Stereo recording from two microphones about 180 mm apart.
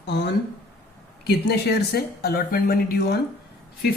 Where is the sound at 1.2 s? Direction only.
65° left (ahead or behind).